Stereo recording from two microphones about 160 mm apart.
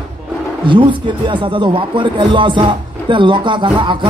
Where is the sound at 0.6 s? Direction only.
30° right (ahead or behind).